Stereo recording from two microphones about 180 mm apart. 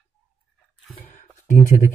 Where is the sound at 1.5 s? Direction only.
45° left (ahead or behind).